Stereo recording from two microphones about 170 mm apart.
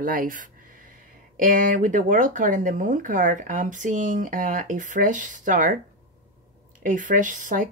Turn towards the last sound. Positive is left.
turn(degrees=-50)  # may be behind; listen again after turning